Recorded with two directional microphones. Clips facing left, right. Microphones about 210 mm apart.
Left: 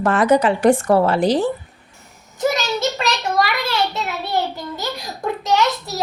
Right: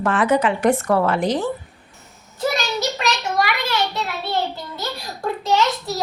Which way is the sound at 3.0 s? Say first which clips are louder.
Left 2 dB; 35° left (ahead or behind).